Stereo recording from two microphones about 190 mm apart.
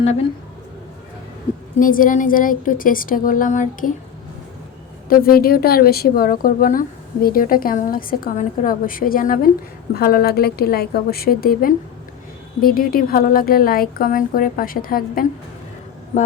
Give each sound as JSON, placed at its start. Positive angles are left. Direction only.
{"t": 0.0, "sound": "speech", "side_deg": 35}
{"t": 1.8, "sound": "a woman's voice", "side_deg": 45}
{"t": 5.0, "sound": "a woman's voice", "side_deg": 50}